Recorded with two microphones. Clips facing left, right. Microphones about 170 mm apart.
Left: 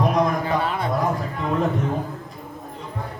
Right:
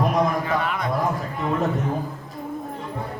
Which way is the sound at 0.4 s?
30° left (ahead or behind).